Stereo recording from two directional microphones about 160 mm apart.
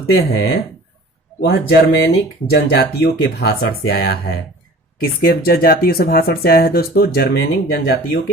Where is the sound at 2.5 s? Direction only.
90° left.